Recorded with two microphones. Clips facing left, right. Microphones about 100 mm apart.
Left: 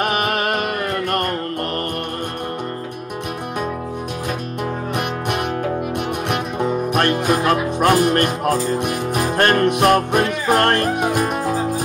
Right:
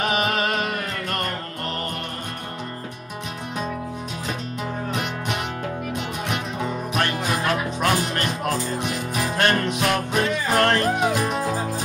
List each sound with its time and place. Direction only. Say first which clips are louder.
0.0 s music: left 3 dB; 55° left (ahead or behind)
6.6 s music: left 7 dB; 55° left (ahead or behind)